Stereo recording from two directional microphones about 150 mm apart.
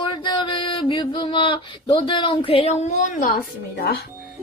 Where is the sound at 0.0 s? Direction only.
35° left (ahead or behind); by 3.3 s 60° left (ahead or behind).